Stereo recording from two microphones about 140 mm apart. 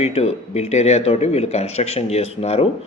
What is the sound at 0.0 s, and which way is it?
A man's voice, 50° left (ahead or behind).